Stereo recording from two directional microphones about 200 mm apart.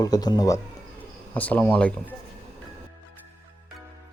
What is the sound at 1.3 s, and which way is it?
Speech, 10° left (ahead or behind).